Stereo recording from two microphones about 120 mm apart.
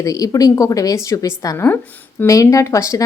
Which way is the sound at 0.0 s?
30° left (ahead or behind).